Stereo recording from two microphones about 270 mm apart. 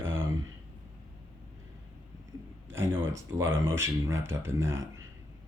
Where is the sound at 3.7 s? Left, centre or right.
Centre.